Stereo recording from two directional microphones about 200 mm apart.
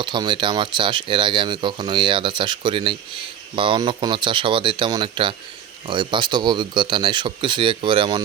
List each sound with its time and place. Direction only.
0.0 s speech: 25° right (ahead or behind)